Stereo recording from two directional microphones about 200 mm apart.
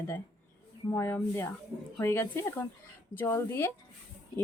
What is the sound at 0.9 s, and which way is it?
Speech, 10° left (ahead or behind).